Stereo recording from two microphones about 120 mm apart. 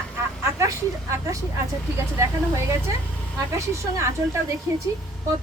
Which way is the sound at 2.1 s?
25° right (ahead or behind).